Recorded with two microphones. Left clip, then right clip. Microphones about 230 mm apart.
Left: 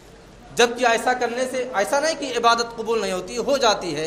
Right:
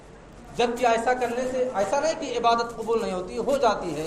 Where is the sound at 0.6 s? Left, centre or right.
Left.